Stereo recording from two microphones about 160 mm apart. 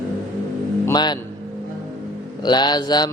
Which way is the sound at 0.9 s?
25° left (ahead or behind).